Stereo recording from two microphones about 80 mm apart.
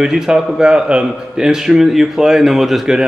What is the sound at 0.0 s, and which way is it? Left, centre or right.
A man's voice, centre.